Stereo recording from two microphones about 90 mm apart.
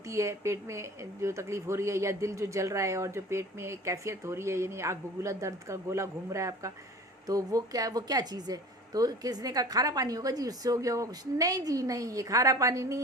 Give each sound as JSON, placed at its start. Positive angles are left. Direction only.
{"t": 0.1, "sound": "speech", "side_deg": -35}